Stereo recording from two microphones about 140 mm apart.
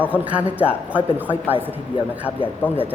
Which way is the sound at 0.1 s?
10° right (ahead or behind).